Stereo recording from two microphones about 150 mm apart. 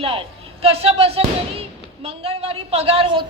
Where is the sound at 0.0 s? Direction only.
35° right (ahead or behind).